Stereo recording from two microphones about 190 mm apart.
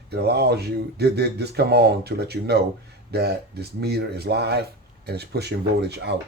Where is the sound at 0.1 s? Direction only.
55° right (ahead or behind).